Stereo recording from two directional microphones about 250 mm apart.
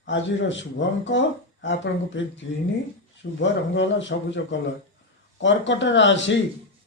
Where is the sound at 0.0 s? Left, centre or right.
Left.